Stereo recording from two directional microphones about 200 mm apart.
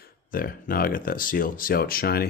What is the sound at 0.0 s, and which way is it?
Speech, 45° left (ahead or behind).